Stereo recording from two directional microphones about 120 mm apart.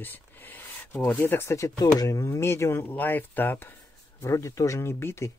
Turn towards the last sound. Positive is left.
turn(degrees=20)  # may be behind; listen again after turning